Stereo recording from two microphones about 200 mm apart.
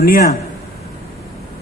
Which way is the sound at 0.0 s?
50° left (ahead or behind).